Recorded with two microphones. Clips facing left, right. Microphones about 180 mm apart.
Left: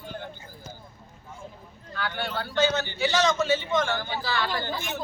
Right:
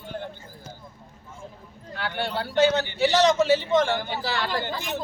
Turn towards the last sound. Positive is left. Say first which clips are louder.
# right 2 dB
turn(degrees=0)  # may be behind; listen again after turning